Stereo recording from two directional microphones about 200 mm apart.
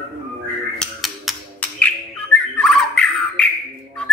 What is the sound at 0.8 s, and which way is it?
Bird, centre (ahead or behind).